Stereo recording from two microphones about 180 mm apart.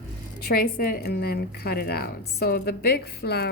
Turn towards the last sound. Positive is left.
turn(degrees=60)  # may be behind; listen again after turning